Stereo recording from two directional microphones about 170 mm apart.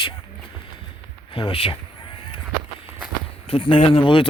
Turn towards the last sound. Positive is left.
turn(degrees=30)  # may be behind; listen again after turning